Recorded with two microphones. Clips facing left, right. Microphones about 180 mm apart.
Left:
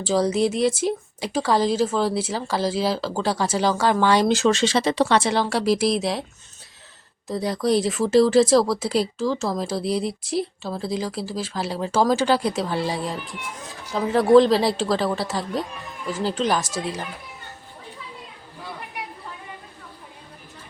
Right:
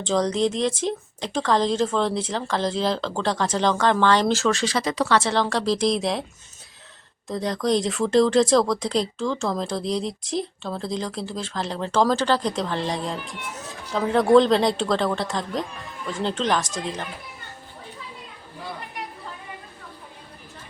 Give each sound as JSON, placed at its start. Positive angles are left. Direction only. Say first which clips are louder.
{"t": 0.0, "sound": "speech", "louder": "left 1 dB", "side_deg": 5}
{"t": 7.3, "sound": "speech", "louder": "left 1 dB", "side_deg": 5}